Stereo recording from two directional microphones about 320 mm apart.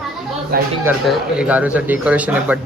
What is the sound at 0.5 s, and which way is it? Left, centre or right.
Speech, right.